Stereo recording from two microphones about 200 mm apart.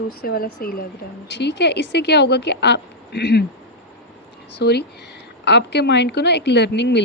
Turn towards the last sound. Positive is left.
turn(degrees=60)  # may be behind; listen again after turning